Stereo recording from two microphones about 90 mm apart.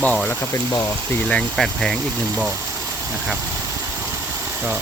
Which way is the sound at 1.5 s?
5° left (ahead or behind).